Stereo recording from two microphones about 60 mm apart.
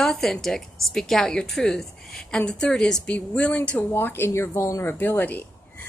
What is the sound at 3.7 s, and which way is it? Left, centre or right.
Speech, left.